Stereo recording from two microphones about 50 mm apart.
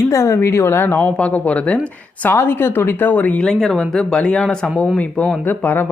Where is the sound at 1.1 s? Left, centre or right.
Left.